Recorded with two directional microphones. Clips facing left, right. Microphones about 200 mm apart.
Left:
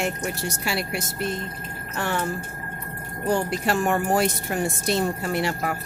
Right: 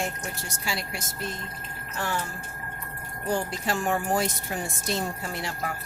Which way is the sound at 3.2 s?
65° left (ahead or behind).